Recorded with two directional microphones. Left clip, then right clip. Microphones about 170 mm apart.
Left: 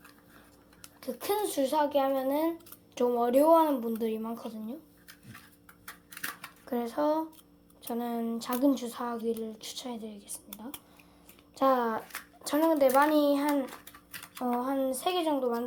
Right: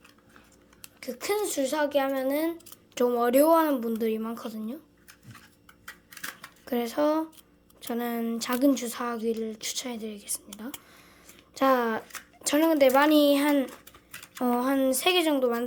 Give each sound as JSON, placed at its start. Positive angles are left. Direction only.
{"t": 0.8, "sound": "a child's voice", "side_deg": -10}
{"t": 6.7, "sound": "a child's voice", "side_deg": -25}
{"t": 11.5, "sound": "a child's voice", "side_deg": -25}